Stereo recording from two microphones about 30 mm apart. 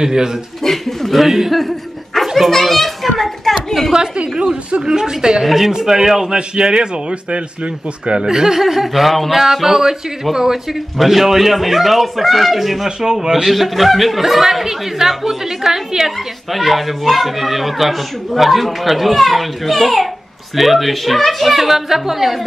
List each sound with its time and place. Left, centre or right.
0.0 s a woman's voice: right
0.7 s speech: centre
2.3 s children playing: centre
3.5 s a sound: centre
4.8 s a woman's voice: right
5.4 s speech: centre
6.3 s a man's voice: right
8.3 s speech: centre
10.3 s speech: centre
11.0 s speech: centre
12.8 s a woman's voice: right
13.5 s speech: centre
14.4 s speech: centre
16.5 s speech: centre